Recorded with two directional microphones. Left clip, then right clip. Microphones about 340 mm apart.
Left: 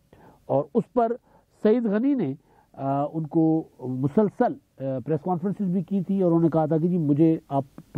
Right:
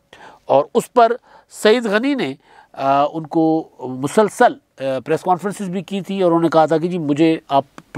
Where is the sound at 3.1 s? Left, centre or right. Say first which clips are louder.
Right 6 dB; centre.